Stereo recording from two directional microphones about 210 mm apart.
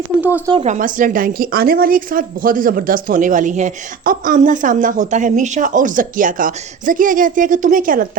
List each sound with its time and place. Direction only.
0.3 s speech: 20° right (ahead or behind)
0.6 s a woman's voice: 35° right (ahead or behind)